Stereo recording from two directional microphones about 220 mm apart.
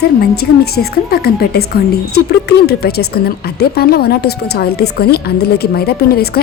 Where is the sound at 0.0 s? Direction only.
45° left (ahead or behind).